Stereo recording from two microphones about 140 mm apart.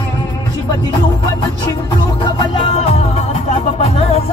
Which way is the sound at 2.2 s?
35° left (ahead or behind).